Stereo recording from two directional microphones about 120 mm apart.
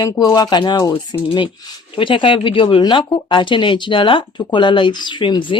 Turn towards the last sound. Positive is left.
turn(degrees=40)  # may be behind; listen again after turning